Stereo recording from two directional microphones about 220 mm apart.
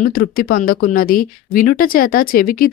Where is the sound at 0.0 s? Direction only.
40° left (ahead or behind).